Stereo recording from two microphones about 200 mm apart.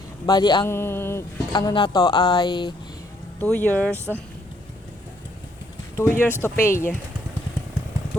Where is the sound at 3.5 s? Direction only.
10° left (ahead or behind).